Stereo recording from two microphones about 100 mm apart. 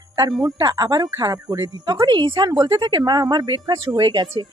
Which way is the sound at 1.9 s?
50° right (ahead or behind).